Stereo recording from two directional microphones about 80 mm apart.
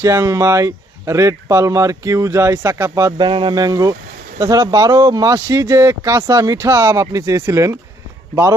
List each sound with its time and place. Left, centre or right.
0.0 s speech: right
3.2 s speech: right
5.5 s speech: right